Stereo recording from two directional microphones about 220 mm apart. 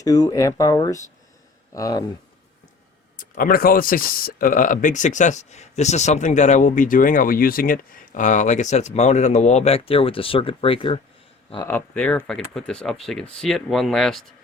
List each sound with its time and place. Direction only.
0.0 s speech: 15° left (ahead or behind)
3.2 s speech: 40° left (ahead or behind); by 11.0 s 25° left (ahead or behind)
11.5 s speech: 10° left (ahead or behind)